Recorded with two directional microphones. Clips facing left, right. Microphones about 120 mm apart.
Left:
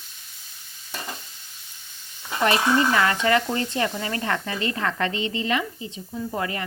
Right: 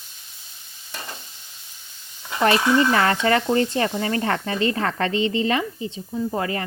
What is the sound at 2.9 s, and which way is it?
Speech, 35° right (ahead or behind).